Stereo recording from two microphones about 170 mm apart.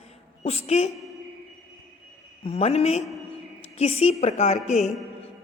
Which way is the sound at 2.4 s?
35° left (ahead or behind).